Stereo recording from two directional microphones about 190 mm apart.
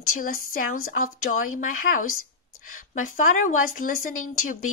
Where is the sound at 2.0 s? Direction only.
90° left.